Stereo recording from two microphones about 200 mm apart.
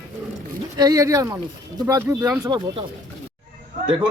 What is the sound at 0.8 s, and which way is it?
Speech, 20° right (ahead or behind).